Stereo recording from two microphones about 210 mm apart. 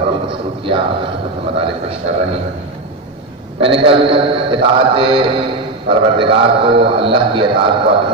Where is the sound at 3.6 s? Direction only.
25° right (ahead or behind).